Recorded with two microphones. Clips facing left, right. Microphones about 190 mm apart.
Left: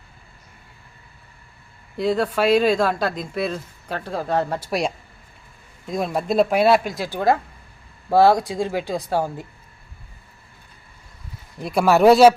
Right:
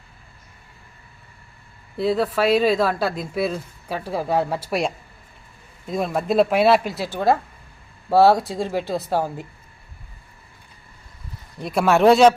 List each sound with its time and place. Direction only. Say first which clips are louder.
2.0 s speech: even; 5° right (ahead or behind)
5.9 s speech: right 1 dB; centre (ahead or behind)
11.5 s speech: left 1 dB; centre (ahead or behind)